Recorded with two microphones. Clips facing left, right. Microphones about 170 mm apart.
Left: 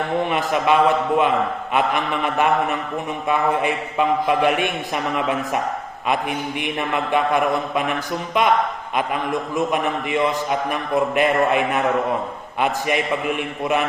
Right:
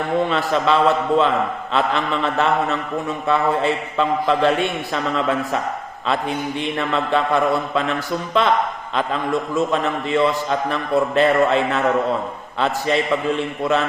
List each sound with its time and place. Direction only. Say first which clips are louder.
0.3 s a man's voice: even; 15° left (ahead or behind)